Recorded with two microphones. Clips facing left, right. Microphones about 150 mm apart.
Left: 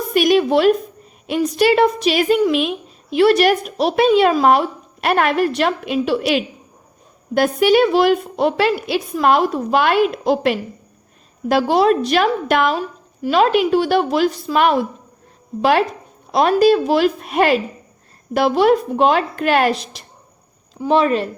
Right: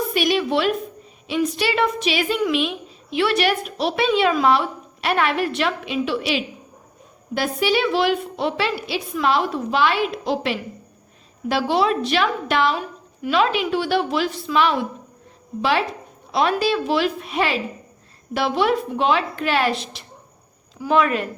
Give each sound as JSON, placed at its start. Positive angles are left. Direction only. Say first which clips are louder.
{"t": 0.1, "sound": "a woman's voice", "louder": "left 9 dB", "side_deg": 45}
{"t": 16.3, "sound": "a woman's voice", "louder": "left 7 dB", "side_deg": 40}
{"t": 20.7, "sound": "speech", "louder": "left 3 dB", "side_deg": 30}